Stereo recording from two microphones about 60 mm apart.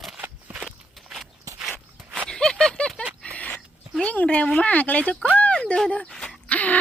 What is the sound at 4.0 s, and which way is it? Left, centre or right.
Speech, left.